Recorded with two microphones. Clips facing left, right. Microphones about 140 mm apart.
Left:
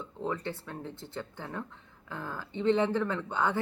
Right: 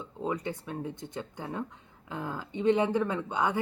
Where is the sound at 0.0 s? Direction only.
15° right (ahead or behind).